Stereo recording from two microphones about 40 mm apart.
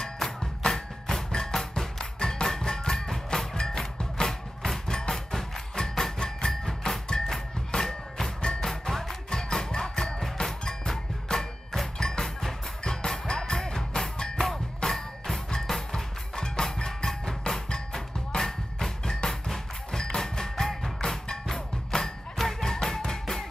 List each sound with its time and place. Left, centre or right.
0.2 s music: centre
15.6 s percussion: centre
21.5 s music: centre